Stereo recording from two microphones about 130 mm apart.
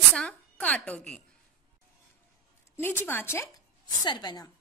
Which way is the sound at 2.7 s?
15° left (ahead or behind).